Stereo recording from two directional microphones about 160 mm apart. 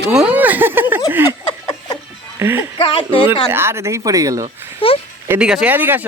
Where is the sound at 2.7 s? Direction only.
35° left (ahead or behind).